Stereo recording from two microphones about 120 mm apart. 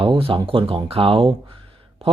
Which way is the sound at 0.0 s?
50° right (ahead or behind).